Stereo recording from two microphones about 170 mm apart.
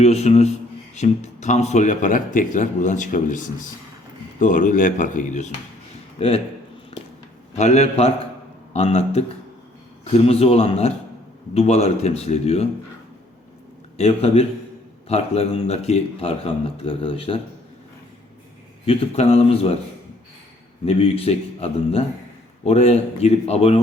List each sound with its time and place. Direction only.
0.0 s a man's voice: 40° left (ahead or behind)
6.1 s a man's voice: 35° left (ahead or behind)
6.9 s a sound: 35° left (ahead or behind)
7.5 s a man's voice: 40° left (ahead or behind)
13.9 s a man's voice: 35° left (ahead or behind)
18.9 s a man's voice: 35° left (ahead or behind)
20.8 s a man's voice: 35° left (ahead or behind)